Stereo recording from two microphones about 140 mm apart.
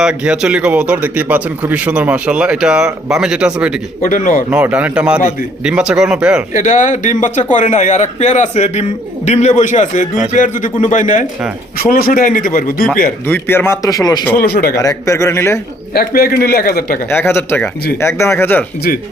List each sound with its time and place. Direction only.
0.0 s speech: 5° right (ahead or behind)
4.0 s speech: 75° left (ahead or behind)
4.5 s speech: 10° right (ahead or behind)
6.5 s a man's voice: 65° left (ahead or behind)
11.8 s a man's voice: 90° left
13.2 s speech: 15° left (ahead or behind)
16.0 s a man's voice: 90° left
17.1 s speech: 15° left (ahead or behind)
18.9 s a man's voice: 90° left